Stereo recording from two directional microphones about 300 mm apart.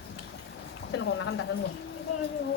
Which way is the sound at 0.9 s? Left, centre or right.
Left.